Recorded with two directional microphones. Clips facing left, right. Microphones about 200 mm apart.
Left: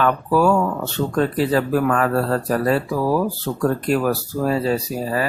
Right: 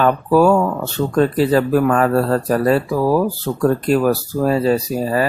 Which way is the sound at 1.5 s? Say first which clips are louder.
Right 3 dB; 35° right (ahead or behind).